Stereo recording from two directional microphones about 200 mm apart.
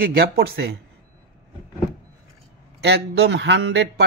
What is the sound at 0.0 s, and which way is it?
Speech, 50° right (ahead or behind).